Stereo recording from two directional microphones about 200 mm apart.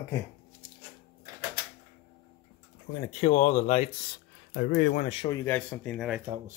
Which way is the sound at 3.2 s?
35° left (ahead or behind).